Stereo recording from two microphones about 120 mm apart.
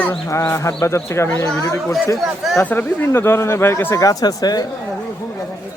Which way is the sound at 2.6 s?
15° left (ahead or behind).